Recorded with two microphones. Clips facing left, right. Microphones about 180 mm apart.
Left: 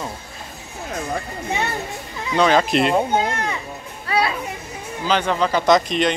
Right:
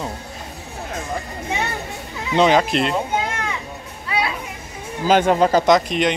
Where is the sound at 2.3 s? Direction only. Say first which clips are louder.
Right 1 dB; 20° right (ahead or behind).